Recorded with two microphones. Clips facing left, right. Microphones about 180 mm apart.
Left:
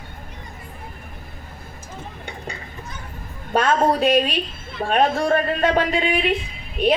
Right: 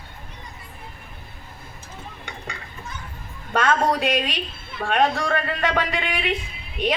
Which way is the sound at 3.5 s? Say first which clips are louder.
Left 3 dB; 40° left (ahead or behind).